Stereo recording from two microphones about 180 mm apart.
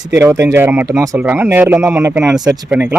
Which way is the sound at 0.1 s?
15° right (ahead or behind).